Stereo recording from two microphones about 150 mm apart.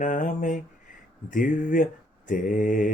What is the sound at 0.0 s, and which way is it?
Mantra, 60° left (ahead or behind).